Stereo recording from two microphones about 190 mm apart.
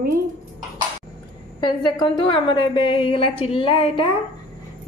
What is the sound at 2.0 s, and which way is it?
A woman's voice, 25° left (ahead or behind).